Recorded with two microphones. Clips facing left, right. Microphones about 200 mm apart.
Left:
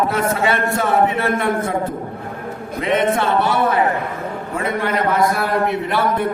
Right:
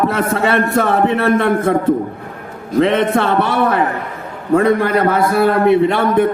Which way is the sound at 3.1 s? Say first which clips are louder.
Right 2 dB; 60° right (ahead or behind).